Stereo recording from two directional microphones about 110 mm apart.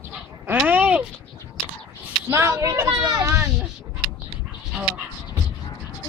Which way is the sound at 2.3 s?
25° right (ahead or behind).